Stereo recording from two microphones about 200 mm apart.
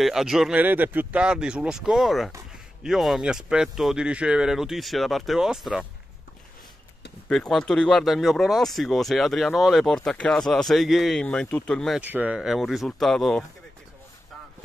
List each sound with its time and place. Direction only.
0.0 s speech: centre (ahead or behind)
7.2 s speech: centre (ahead or behind)
12.0 s speech: 10° right (ahead or behind)